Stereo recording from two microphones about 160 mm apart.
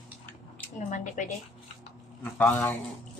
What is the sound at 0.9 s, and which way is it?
Speech, 50° left (ahead or behind).